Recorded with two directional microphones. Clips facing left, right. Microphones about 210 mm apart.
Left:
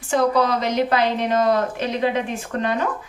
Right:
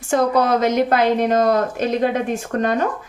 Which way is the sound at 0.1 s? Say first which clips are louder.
Right 2 dB; 50° right (ahead or behind).